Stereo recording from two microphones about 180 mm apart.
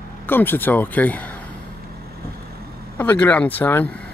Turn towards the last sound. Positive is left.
turn(degrees=10)  # may be behind; listen again after turning